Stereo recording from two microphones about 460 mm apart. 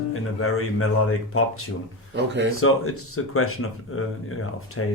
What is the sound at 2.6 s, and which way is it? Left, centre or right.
Speech, left.